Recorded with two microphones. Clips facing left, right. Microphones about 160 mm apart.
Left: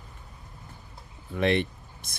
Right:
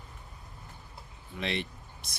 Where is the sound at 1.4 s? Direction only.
55° left (ahead or behind).